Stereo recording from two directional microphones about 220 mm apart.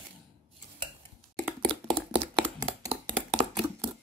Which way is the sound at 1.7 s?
20° right (ahead or behind).